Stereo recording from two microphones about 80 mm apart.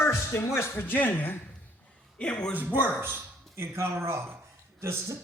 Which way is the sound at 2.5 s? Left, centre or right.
Right.